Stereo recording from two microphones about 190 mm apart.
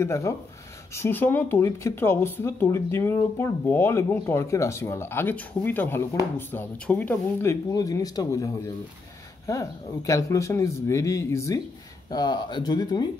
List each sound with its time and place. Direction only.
0.0 s speech: 15° left (ahead or behind)